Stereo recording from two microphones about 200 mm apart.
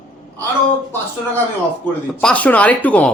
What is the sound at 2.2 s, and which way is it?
Speech, 5° left (ahead or behind).